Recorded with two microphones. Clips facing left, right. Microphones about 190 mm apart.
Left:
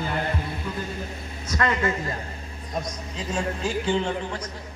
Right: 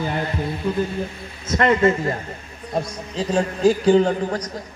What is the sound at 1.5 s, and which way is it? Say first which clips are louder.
A man's voice: right 8 dB; 25° right (ahead or behind).